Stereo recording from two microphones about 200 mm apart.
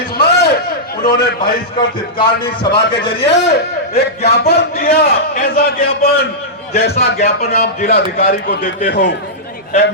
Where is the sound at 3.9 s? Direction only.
50° left (ahead or behind).